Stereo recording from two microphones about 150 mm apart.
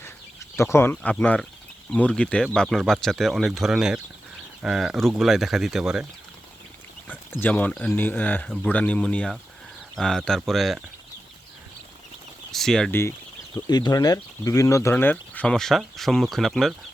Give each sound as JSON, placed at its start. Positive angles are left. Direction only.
{"t": 0.0, "sound": "speech", "side_deg": 20}
{"t": 7.1, "sound": "speech", "side_deg": 10}
{"t": 12.5, "sound": "speech", "side_deg": 5}
{"t": 12.9, "sound": "speech", "side_deg": 15}
{"t": 13.7, "sound": "speech", "side_deg": 25}